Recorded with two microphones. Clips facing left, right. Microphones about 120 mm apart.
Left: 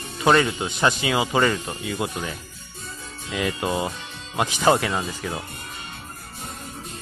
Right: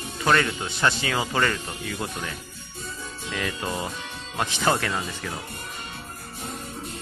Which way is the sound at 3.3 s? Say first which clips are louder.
Left 5 dB; 15° left (ahead or behind).